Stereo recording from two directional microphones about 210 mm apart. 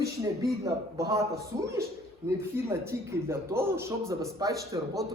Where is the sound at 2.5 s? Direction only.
10° right (ahead or behind).